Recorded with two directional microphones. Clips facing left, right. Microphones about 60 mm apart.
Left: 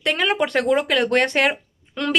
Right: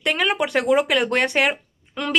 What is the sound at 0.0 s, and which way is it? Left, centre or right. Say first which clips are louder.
Speech: left 1 dB; centre.